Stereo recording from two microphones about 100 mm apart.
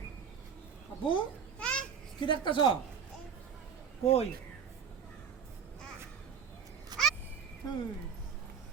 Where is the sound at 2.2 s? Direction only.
50° left (ahead or behind).